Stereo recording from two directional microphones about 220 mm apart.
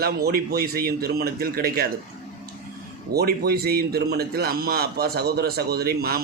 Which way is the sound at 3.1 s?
45° right (ahead or behind).